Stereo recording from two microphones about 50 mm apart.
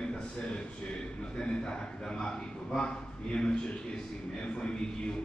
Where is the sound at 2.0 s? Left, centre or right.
Centre.